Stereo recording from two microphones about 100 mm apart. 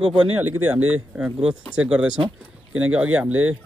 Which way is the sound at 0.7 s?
10° right (ahead or behind).